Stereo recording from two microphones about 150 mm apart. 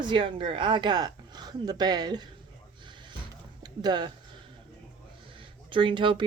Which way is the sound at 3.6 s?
30° right (ahead or behind).